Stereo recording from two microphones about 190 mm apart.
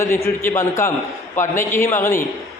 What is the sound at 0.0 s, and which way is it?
A man's voice, 15° left (ahead or behind).